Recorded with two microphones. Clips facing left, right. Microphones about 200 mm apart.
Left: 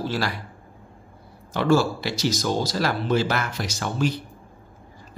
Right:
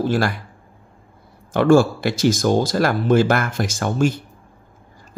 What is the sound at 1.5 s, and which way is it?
Speech, 50° right (ahead or behind).